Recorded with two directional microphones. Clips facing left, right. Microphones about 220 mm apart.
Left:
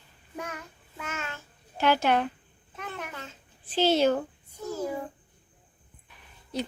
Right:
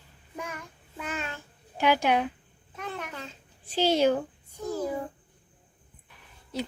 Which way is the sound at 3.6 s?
10° right (ahead or behind).